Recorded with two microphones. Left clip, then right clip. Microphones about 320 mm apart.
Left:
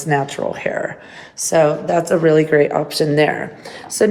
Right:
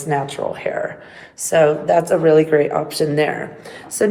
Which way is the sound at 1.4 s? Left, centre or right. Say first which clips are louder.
Even; centre.